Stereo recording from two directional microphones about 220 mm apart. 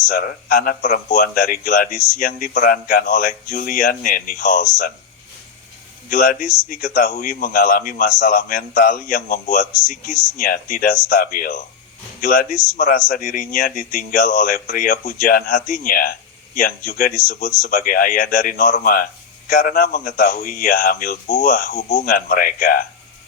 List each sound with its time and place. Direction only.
0.1 s speech: 40° left (ahead or behind)
6.1 s speech: 40° left (ahead or behind)